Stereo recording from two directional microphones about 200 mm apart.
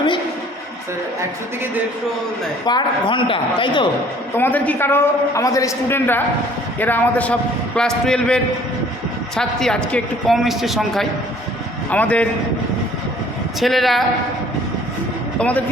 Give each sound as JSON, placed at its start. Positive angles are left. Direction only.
{"t": 2.6, "sound": "speech", "side_deg": 25}
{"t": 4.4, "sound": "a man's voice", "side_deg": 10}
{"t": 13.6, "sound": "a man's voice", "side_deg": 0}
{"t": 15.4, "sound": "a man's voice", "side_deg": 5}